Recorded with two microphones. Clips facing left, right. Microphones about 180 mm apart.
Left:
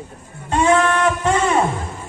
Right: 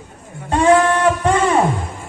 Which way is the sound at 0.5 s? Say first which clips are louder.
Right 3 dB; 35° right (ahead or behind).